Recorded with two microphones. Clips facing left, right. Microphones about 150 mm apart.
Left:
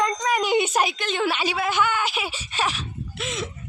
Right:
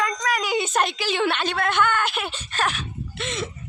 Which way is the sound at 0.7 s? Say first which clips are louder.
Even; centre (ahead or behind).